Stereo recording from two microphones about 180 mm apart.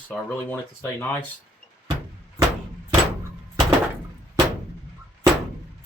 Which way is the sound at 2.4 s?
20° right (ahead or behind).